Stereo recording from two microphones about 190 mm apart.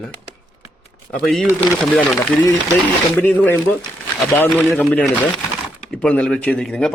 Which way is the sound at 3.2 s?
10° left (ahead or behind).